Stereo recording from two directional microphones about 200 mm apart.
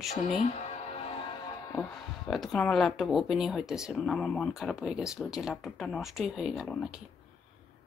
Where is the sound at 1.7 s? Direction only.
5° left (ahead or behind).